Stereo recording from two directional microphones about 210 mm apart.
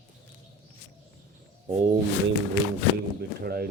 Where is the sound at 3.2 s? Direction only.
45° right (ahead or behind).